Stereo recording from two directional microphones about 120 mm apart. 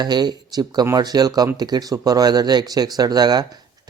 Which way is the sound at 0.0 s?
35° right (ahead or behind).